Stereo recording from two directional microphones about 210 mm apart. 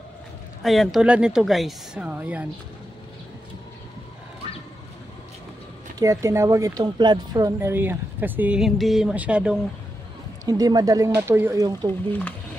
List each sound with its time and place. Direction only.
0.6 s speech: centre (ahead or behind)
5.9 s speech: 15° right (ahead or behind)
10.4 s speech: 15° right (ahead or behind)
12.1 s speech: 10° left (ahead or behind)